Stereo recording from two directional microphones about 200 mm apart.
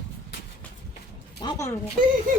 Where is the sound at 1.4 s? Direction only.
20° left (ahead or behind).